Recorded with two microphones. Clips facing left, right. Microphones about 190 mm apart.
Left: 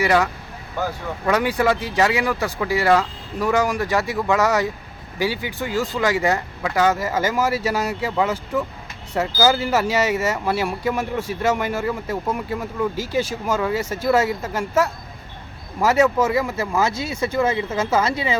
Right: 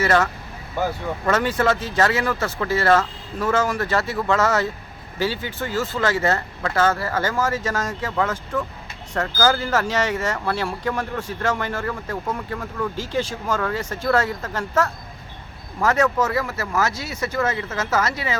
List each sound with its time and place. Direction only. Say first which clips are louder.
0.0 s speech: left 1 dB; 15° left (ahead or behind)
1.3 s speech: left 1 dB; 10° left (ahead or behind)
16.8 s speech: left 3 dB; 25° left (ahead or behind)